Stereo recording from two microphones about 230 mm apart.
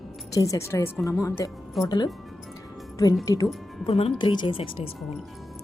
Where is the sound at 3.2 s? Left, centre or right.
Centre.